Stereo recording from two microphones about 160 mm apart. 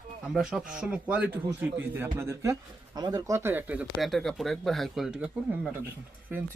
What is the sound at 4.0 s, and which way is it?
A man's voice, centre (ahead or behind).